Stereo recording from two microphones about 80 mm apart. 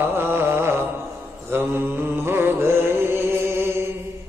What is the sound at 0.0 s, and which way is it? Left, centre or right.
Mantra, right.